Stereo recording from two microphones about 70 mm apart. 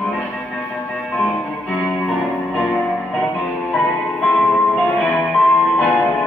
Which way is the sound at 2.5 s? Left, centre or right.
Centre.